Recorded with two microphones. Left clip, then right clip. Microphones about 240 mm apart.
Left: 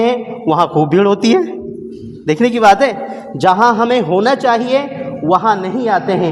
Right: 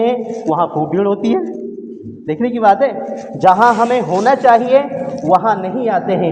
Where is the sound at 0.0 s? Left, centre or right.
Left.